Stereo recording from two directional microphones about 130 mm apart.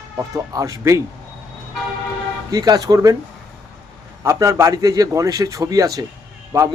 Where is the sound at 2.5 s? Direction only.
30° right (ahead or behind).